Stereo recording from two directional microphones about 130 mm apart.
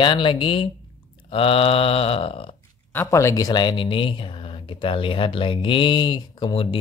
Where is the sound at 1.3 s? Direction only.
45° left (ahead or behind).